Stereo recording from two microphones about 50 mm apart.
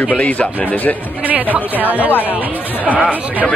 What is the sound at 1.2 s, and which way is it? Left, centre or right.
Speech, right.